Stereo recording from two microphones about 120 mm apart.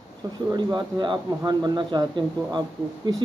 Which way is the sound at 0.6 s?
35° right (ahead or behind).